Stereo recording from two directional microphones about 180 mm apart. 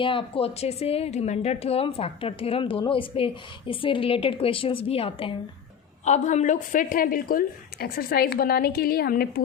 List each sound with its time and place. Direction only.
0.0 s a woman's voice: 30° left (ahead or behind); by 9.4 s 60° left (ahead or behind)